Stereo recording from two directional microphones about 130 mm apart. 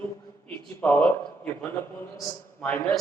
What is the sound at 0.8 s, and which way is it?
Speech, 10° left (ahead or behind).